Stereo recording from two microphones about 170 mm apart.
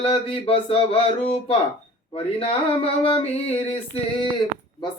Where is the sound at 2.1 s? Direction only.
35° left (ahead or behind).